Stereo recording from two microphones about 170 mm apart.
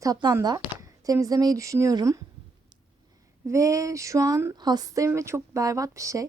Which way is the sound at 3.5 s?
20° right (ahead or behind).